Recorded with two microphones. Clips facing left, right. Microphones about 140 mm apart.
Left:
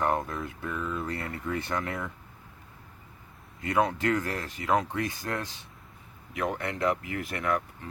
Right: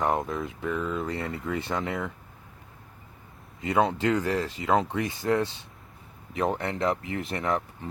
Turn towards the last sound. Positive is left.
turn(degrees=-25)  # may be behind; listen again after turning